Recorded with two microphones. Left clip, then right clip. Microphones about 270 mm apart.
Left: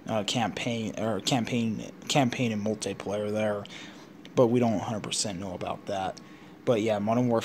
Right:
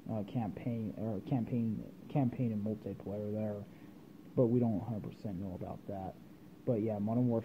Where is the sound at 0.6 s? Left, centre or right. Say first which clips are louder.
Left 10 dB; left.